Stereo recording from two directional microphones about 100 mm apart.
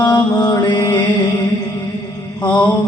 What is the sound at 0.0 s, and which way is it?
Mantra, 45° left (ahead or behind).